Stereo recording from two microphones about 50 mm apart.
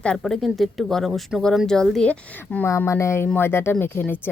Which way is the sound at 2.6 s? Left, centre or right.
Left.